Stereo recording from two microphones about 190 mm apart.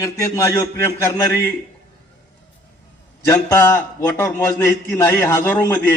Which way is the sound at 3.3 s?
15° left (ahead or behind).